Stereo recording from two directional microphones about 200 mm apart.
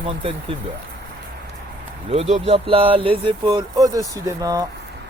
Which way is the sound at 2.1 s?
30° right (ahead or behind).